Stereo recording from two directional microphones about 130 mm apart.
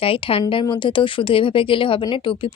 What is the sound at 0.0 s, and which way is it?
A woman's voice, 45° left (ahead or behind).